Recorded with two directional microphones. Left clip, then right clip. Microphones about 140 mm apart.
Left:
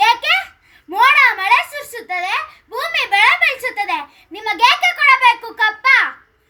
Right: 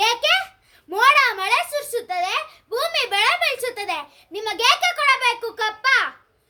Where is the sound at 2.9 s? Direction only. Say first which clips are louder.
Left 8 dB; 45° right (ahead or behind).